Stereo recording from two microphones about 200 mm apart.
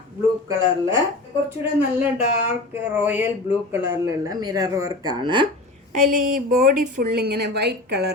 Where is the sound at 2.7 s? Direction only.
10° right (ahead or behind).